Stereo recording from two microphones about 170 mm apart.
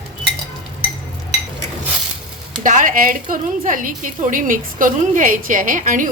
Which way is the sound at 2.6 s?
50° right (ahead or behind).